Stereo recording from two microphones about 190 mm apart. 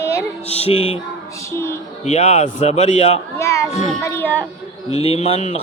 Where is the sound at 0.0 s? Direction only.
15° left (ahead or behind).